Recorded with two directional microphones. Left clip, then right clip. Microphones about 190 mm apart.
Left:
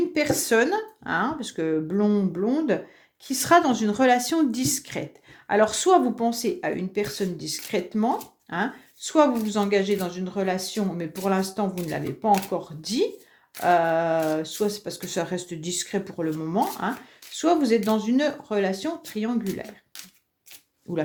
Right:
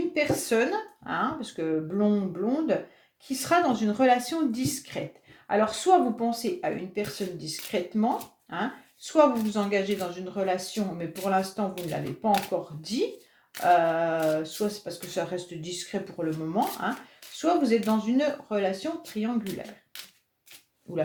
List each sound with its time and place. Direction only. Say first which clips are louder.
0.4 s speech: left 4 dB; 40° left (ahead or behind)